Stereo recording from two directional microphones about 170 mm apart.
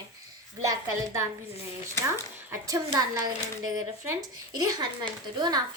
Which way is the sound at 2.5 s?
20° right (ahead or behind).